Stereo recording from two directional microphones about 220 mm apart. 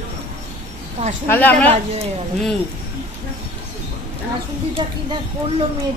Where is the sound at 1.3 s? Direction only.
10° left (ahead or behind).